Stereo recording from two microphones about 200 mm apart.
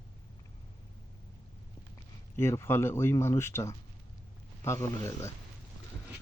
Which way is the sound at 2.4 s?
10° left (ahead or behind).